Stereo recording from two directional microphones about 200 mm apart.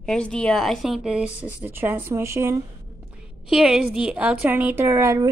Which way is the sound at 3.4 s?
Centre (ahead or behind).